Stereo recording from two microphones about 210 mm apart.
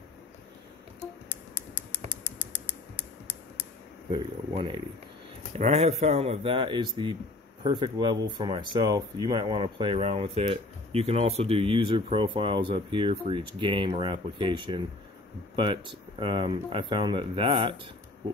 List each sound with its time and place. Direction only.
4.1 s speech: 20° right (ahead or behind)